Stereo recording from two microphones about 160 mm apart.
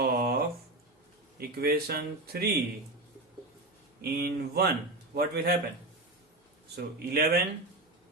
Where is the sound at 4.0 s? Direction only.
85° right.